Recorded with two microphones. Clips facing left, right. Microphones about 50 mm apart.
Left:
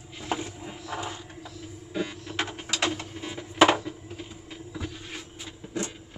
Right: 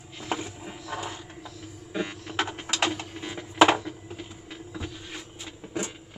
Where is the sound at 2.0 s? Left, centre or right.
Right.